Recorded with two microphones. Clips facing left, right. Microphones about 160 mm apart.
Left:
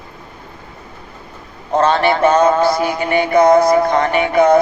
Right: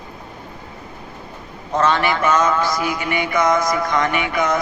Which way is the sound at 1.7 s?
35° left (ahead or behind).